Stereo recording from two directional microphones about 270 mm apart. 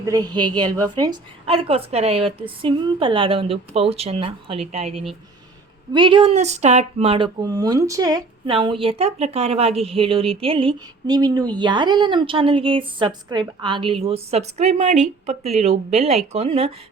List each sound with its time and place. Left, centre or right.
0.0 s speech: centre